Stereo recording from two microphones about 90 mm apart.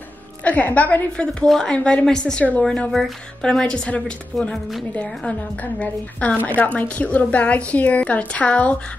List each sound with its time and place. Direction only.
0.4 s speech: 15° left (ahead or behind)
5.8 s speech: 15° left (ahead or behind)